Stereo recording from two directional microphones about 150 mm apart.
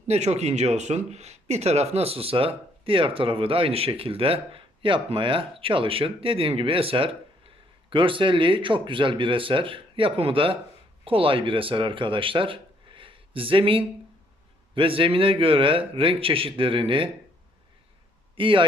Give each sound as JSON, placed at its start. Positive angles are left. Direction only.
{"t": 0.1, "sound": "speech", "side_deg": -45}
{"t": 18.3, "sound": "speech", "side_deg": -35}